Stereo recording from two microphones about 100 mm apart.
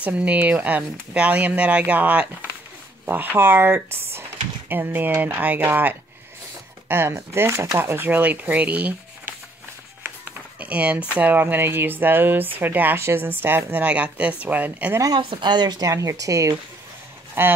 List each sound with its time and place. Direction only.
0.0 s speech: 15° right (ahead or behind)
10.6 s speech: 15° right (ahead or behind)
15.1 s speech: 50° right (ahead or behind); by 16.5 s 30° right (ahead or behind)